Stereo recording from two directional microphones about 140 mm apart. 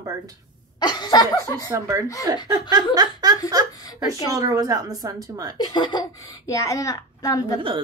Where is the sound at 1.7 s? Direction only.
20° right (ahead or behind).